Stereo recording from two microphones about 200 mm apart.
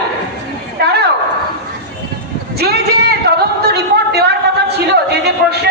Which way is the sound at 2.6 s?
55° right (ahead or behind).